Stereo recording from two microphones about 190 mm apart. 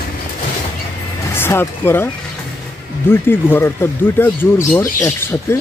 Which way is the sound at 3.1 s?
10° left (ahead or behind).